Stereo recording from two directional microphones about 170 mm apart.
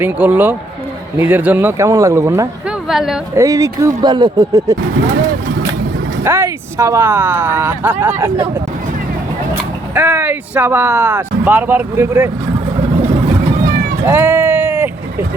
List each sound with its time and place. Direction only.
0.0 s speech: 10° right (ahead or behind)
2.6 s a sound: 5° right (ahead or behind)
3.3 s speech: 20° right (ahead or behind)
6.2 s speech: 15° right (ahead or behind)
9.9 s speech: 10° right (ahead or behind)
14.0 s a sound: 10° right (ahead or behind)